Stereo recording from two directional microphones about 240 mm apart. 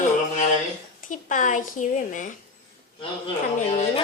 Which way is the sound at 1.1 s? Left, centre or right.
Left.